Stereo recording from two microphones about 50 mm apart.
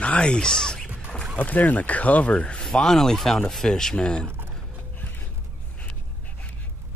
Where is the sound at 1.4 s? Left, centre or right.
Left.